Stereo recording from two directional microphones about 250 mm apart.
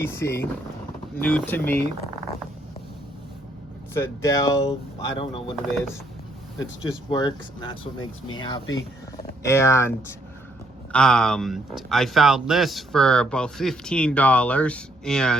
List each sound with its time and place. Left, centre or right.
0.0 s speech: centre
3.9 s speech: centre
6.6 s speech: centre